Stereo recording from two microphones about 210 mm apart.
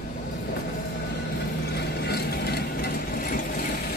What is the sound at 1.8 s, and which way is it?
Vehicle, 50° left (ahead or behind).